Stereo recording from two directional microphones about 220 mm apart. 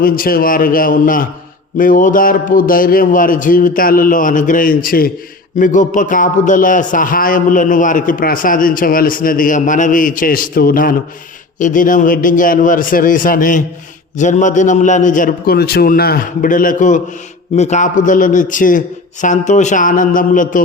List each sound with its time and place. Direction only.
0.0 s a man's voice: 40° left (ahead or behind)